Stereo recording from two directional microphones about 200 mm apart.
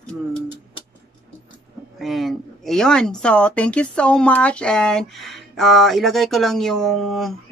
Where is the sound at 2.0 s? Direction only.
Centre (ahead or behind).